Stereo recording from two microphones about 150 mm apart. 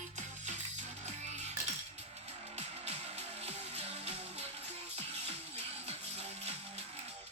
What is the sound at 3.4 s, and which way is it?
Music, 45° right (ahead or behind).